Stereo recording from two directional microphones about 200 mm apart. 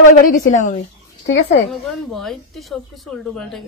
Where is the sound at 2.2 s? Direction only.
Centre (ahead or behind).